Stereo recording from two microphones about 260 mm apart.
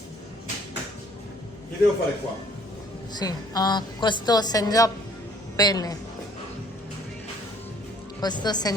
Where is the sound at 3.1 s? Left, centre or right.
Centre.